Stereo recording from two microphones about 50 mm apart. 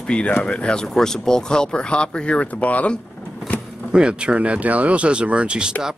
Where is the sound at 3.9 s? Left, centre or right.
Centre.